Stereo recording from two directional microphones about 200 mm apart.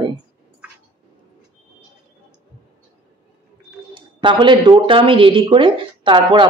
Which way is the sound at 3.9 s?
25° right (ahead or behind).